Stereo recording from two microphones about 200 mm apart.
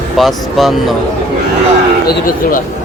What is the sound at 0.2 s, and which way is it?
Cattle, centre (ahead or behind).